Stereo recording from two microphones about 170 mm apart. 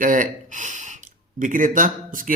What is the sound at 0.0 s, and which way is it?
A man's voice, 50° right (ahead or behind).